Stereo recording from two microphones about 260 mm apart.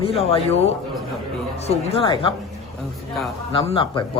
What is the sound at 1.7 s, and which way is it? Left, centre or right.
Speech, centre.